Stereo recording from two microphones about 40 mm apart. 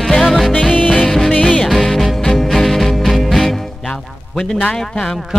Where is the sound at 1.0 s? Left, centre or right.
Centre.